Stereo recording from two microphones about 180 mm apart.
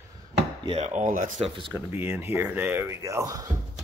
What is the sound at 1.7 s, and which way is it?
Speech, 10° right (ahead or behind).